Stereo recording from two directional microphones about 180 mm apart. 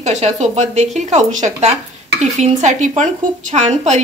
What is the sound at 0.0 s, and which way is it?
A woman's voice, 40° right (ahead or behind).